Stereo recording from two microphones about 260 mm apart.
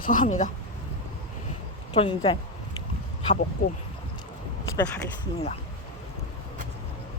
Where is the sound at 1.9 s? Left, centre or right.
Centre.